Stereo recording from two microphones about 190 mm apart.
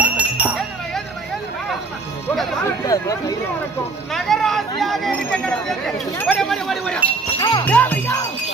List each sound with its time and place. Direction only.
0.0 s music: 10° right (ahead or behind)
2.8 s speech: 20° left (ahead or behind)
4.1 s a sound: centre (ahead or behind)
4.8 s speech: centre (ahead or behind)
7.3 s music: 20° left (ahead or behind)
7.6 s music: 10° left (ahead or behind)